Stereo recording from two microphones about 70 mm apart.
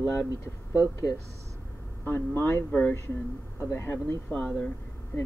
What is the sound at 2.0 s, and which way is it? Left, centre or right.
Speech, left.